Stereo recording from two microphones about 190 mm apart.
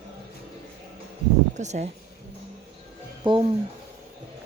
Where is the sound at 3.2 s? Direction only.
25° right (ahead or behind).